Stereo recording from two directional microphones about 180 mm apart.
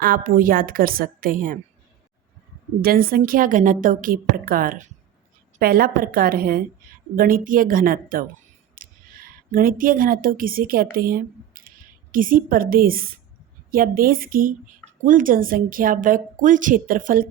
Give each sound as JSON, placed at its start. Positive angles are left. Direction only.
{"t": 0.0, "sound": "a woman's voice", "side_deg": -50}
{"t": 2.8, "sound": "a woman's voice", "side_deg": -55}